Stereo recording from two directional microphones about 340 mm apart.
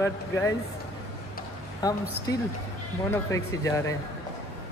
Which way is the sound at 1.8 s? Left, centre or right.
Centre.